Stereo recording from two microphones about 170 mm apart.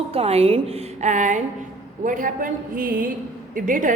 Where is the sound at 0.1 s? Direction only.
35° right (ahead or behind).